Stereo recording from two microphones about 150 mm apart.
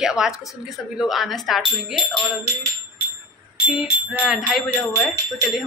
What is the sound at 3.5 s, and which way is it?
Speech, centre (ahead or behind).